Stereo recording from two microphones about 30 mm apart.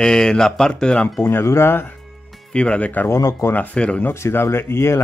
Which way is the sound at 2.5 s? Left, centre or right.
Left.